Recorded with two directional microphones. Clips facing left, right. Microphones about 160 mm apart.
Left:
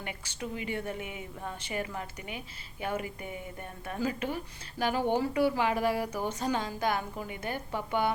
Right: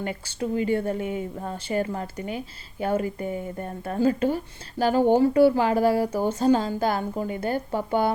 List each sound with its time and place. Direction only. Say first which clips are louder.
0.0 s speech: right 10 dB; 35° right (ahead or behind)